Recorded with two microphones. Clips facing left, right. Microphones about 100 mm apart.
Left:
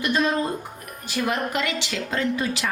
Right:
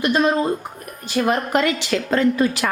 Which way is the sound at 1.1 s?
40° right (ahead or behind).